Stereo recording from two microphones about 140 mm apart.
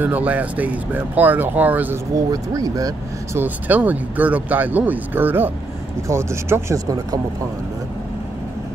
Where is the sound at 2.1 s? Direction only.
25° right (ahead or behind).